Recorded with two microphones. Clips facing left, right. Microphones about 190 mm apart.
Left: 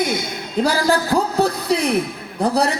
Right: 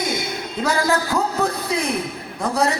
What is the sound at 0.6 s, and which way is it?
A man's voice, 35° left (ahead or behind).